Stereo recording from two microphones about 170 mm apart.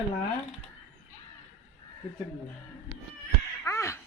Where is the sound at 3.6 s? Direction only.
15° left (ahead or behind).